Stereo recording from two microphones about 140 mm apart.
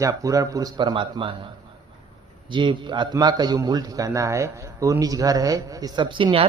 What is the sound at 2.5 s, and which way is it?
Speech, 35° right (ahead or behind).